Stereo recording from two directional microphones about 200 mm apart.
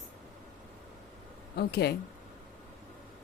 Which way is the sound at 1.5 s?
55° left (ahead or behind).